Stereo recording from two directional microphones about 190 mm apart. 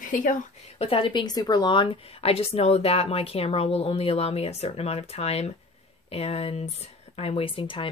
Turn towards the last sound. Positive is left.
turn(degrees=30)  # may be behind; listen again after turning